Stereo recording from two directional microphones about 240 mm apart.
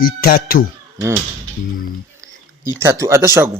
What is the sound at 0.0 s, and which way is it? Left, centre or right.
Speech, left.